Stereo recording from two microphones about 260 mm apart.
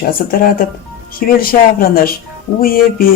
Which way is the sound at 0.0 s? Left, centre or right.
Left.